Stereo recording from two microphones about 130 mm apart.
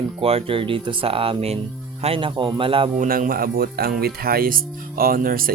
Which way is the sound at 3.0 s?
90° right.